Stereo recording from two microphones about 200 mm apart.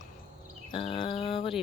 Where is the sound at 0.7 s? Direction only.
25° left (ahead or behind).